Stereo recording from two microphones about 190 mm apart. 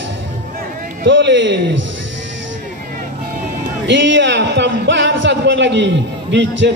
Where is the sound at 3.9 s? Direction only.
70° right (ahead or behind).